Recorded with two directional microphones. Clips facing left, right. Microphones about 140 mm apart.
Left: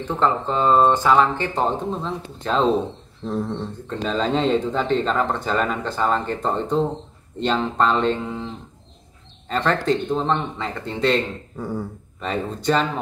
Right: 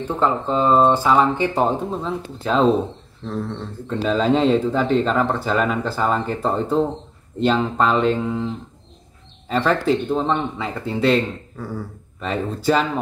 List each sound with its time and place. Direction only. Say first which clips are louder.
0.5 s speech: right 2 dB; 15° right (ahead or behind)
3.3 s speech: left 2 dB; 15° left (ahead or behind)
3.9 s speech: right 4 dB; 5° right (ahead or behind)
9.5 s speech: right 2 dB; 5° right (ahead or behind)
11.5 s beatboxing: left 2 dB; 20° left (ahead or behind)
12.2 s speech: right 1 dB; 5° right (ahead or behind)